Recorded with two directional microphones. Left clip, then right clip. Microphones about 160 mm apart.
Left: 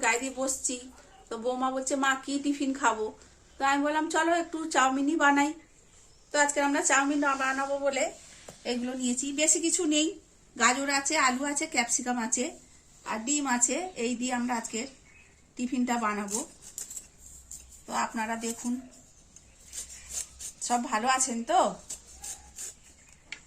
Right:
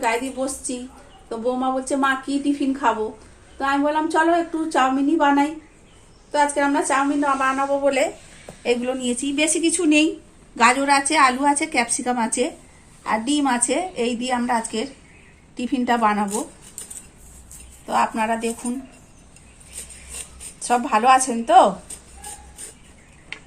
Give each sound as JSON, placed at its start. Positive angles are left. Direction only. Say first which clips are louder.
{"t": 0.0, "sound": "a woman's voice", "louder": "right 6 dB", "side_deg": 15}
{"t": 7.5, "sound": "a woman's voice", "louder": "right 9 dB", "side_deg": -25}
{"t": 17.8, "sound": "a woman's voice", "louder": "right 11 dB", "side_deg": -30}
{"t": 20.6, "sound": "a woman's voice", "louder": "right 10 dB", "side_deg": -20}